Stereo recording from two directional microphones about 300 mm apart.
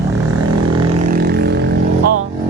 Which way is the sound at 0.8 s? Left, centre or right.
Right.